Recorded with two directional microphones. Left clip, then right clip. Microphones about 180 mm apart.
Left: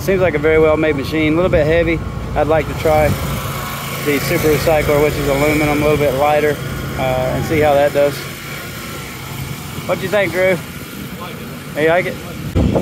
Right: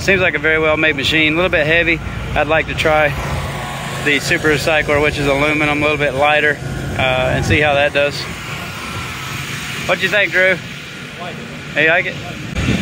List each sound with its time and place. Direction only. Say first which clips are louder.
0.0 s speech: right 1 dB; 15° left (ahead or behind)
4.1 s speech: right 1 dB; 10° left (ahead or behind)
9.8 s speech: right 1 dB; 10° left (ahead or behind)
11.7 s speech: right 1 dB; 15° left (ahead or behind)